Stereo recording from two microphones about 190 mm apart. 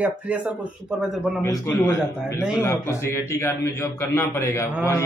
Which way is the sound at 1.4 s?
15° left (ahead or behind).